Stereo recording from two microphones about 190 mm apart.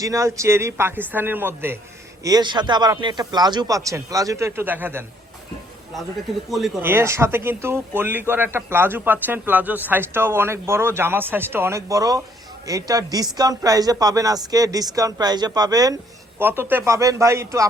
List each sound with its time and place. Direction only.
0.0 s speech: 15° right (ahead or behind)
2.2 s speech: 20° right (ahead or behind)
6.5 s speech: centre (ahead or behind)
6.9 s speech: 15° right (ahead or behind)